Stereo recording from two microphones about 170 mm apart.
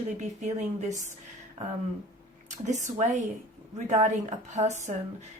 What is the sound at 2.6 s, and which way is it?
A woman's voice, 45° right (ahead or behind).